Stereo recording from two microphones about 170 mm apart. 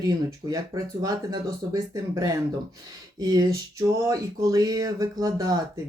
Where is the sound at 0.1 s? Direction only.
20° right (ahead or behind).